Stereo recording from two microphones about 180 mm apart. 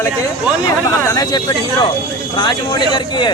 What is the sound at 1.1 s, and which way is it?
Speech, 25° left (ahead or behind).